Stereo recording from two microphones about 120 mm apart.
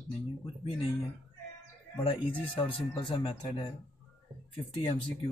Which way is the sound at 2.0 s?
45° left (ahead or behind).